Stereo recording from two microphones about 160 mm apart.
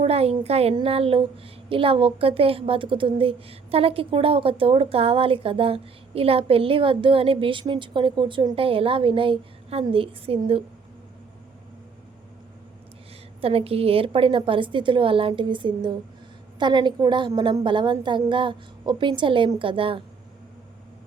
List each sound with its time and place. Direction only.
0.0 s a woman's voice: 40° right (ahead or behind)
13.4 s a woman's voice: 35° right (ahead or behind)